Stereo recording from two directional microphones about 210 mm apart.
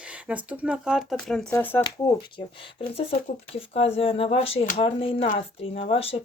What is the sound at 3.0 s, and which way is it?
Speech, 25° left (ahead or behind).